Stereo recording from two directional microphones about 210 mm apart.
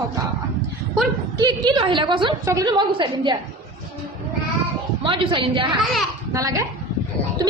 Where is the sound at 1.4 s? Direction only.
20° right (ahead or behind).